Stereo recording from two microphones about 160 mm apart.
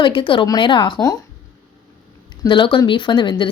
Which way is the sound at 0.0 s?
30° left (ahead or behind).